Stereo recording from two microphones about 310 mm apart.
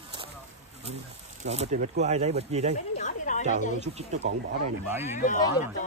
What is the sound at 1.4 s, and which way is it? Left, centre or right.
Speech, right.